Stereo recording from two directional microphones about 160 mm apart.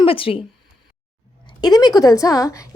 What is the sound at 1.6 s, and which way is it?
A woman's voice, 25° left (ahead or behind).